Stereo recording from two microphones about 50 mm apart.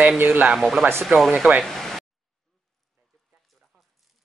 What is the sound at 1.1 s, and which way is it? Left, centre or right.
Speech, right.